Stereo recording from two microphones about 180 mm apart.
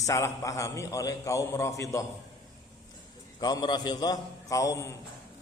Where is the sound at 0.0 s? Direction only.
15° left (ahead or behind).